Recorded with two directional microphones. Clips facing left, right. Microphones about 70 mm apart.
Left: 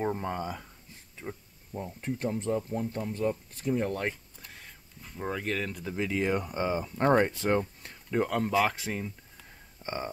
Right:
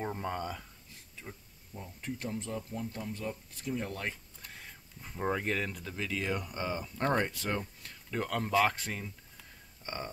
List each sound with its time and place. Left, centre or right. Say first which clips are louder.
0.0 s speech: left 4 dB; centre
1.2 s speech: left 8 dB; left
1.8 s speech: left 7 dB; left
4.1 s a sound: left 2 dB; centre
5.0 s speech: right 1 dB; centre
5.9 s speech: left 10 dB; left
8.1 s speech: left 6 dB; centre
8.4 s speech: right 3 dB; centre
9.8 s speech: left 5 dB; left